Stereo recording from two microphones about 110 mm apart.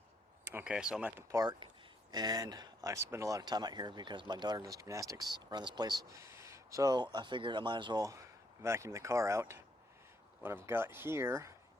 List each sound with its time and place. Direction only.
0.6 s speech: 5° right (ahead or behind)
1.5 s speech: 40° right (ahead or behind)
8.6 s speech: 25° right (ahead or behind)